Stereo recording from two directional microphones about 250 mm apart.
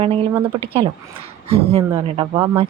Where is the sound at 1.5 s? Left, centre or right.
Right.